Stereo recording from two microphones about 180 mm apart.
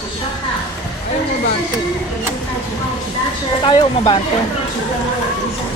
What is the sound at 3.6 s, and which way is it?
Speech, 25° left (ahead or behind).